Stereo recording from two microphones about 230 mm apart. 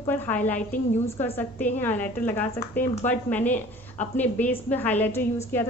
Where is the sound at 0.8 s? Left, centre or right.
Left.